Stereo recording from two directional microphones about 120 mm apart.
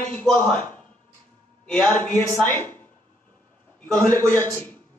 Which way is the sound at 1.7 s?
10° left (ahead or behind).